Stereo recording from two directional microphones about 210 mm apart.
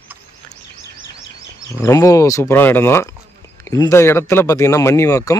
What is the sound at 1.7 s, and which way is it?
Speech, 15° left (ahead or behind).